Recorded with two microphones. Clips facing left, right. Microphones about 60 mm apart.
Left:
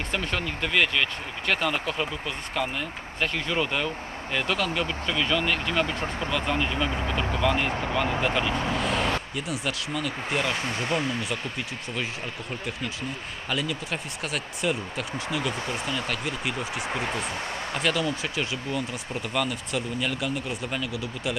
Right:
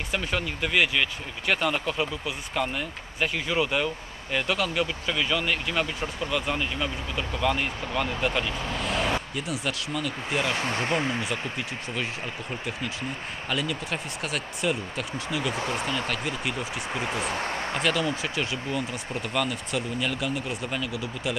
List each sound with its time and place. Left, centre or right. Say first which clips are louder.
0.1 s speech: right 1 dB; centre
10.8 s speech: even; right
13.5 s speech: even; centre